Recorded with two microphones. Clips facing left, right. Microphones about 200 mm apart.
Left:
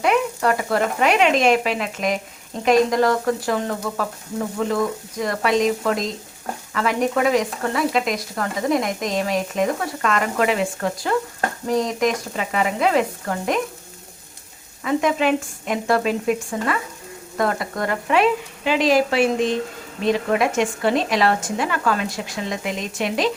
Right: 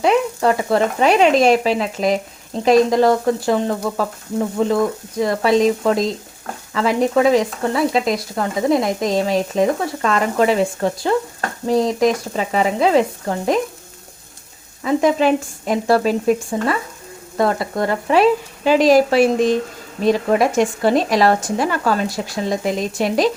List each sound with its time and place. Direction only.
0.0 s sizzle: 30° right (ahead or behind)
14.8 s sizzle: 35° right (ahead or behind)